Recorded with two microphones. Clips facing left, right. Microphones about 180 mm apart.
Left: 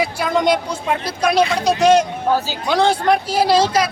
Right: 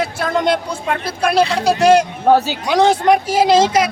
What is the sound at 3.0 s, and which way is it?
Speech, 20° right (ahead or behind).